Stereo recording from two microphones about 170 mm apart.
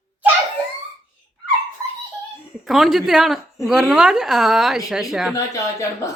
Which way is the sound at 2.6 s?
Centre (ahead or behind).